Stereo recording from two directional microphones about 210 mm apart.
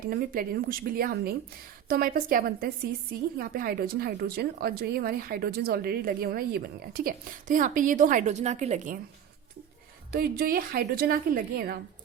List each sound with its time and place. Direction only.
0.1 s a woman's voice: 45° right (ahead or behind)
10.1 s a woman's voice: 45° right (ahead or behind)